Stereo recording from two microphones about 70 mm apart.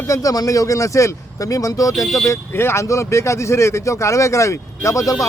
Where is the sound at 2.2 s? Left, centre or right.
Left.